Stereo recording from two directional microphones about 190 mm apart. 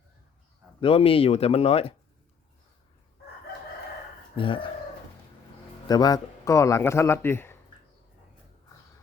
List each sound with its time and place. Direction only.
0.8 s speech: 30° left (ahead or behind)
4.4 s speech: 25° left (ahead or behind)
5.9 s speech: 20° left (ahead or behind)